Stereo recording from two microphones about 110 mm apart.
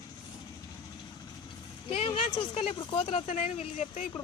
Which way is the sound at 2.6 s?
60° left (ahead or behind).